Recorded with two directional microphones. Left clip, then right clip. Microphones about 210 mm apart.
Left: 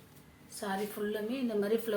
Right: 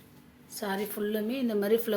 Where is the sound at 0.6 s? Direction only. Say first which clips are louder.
Right 3 dB; 45° right (ahead or behind).